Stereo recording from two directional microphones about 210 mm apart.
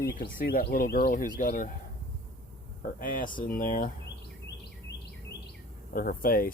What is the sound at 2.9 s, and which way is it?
Speech, 40° left (ahead or behind).